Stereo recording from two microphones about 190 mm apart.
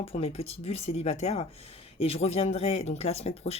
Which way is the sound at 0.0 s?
30° left (ahead or behind).